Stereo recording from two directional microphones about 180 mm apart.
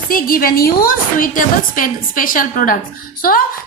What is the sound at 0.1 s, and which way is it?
A woman's voice, 50° left (ahead or behind).